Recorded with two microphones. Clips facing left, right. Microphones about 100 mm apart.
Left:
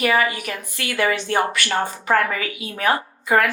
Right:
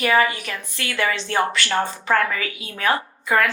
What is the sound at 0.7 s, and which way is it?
A woman's voice, 25° left (ahead or behind).